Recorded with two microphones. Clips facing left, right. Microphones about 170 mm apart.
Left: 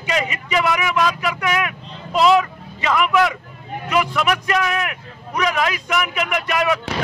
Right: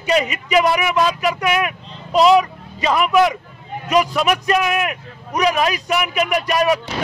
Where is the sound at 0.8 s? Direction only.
15° right (ahead or behind).